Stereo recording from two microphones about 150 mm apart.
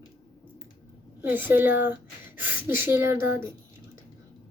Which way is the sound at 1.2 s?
15° right (ahead or behind).